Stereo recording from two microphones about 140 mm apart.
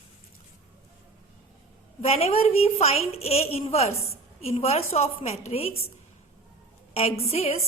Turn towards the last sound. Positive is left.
turn(degrees=45)  # may be behind; listen again after turning